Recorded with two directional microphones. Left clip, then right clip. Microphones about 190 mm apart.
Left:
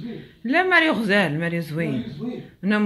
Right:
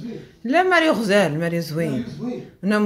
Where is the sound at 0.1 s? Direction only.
5° right (ahead or behind).